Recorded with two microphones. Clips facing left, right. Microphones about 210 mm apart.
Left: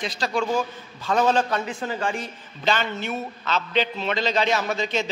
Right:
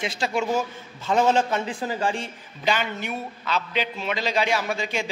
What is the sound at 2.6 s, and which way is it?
A man's voice, 10° right (ahead or behind).